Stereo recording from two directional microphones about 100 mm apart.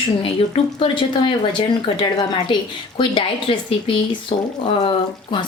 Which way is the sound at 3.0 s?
60° left (ahead or behind).